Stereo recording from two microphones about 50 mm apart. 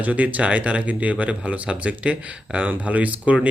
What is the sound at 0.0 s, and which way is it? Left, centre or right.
Speech, right.